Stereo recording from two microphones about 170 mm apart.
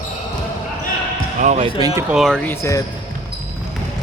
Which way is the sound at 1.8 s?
20° right (ahead or behind).